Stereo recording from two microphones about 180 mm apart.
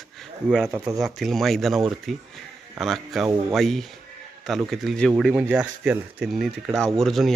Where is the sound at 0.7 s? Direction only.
15° right (ahead or behind).